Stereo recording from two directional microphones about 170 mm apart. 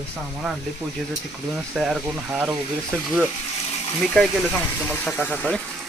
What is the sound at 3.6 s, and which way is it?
Water, 35° left (ahead or behind).